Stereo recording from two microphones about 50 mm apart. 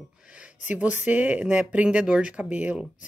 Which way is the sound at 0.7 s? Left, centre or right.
Right.